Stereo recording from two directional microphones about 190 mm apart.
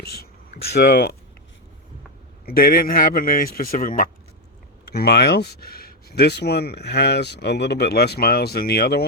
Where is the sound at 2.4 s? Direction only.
50° left (ahead or behind).